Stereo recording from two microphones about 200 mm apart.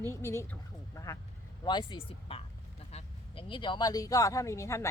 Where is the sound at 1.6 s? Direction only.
20° left (ahead or behind).